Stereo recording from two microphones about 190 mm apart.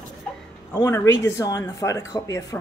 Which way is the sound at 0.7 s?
15° left (ahead or behind).